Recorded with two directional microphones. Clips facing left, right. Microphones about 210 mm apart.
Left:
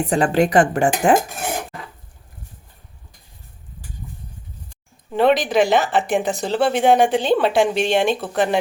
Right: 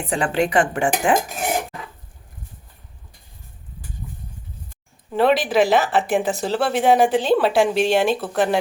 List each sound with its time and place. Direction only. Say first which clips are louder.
0.1 s speech: left 3 dB; 40° left (ahead or behind)
5.1 s speech: left 1 dB; 5° right (ahead or behind)